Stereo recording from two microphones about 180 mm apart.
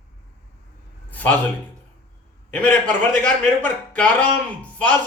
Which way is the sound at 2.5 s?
10° left (ahead or behind).